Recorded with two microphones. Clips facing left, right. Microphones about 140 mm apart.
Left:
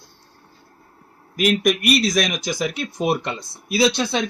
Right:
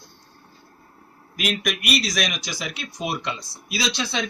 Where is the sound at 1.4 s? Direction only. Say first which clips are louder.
Left 8 dB; 45° left (ahead or behind).